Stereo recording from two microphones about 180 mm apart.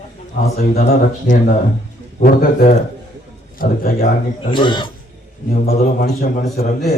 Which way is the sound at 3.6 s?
50° left (ahead or behind).